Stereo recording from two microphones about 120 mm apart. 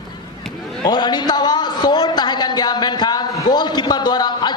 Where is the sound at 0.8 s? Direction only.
35° left (ahead or behind).